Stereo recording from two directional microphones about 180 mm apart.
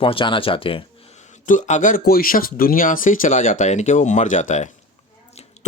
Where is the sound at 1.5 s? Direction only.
45° left (ahead or behind).